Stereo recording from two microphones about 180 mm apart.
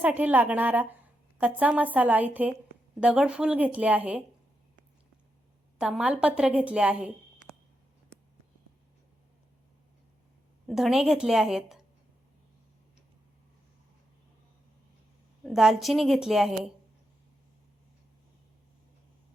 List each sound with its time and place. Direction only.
0.0 s speech: 10° right (ahead or behind)
5.8 s a woman's voice: 5° right (ahead or behind)
10.7 s a woman's voice: centre (ahead or behind)
15.4 s a woman's voice: centre (ahead or behind)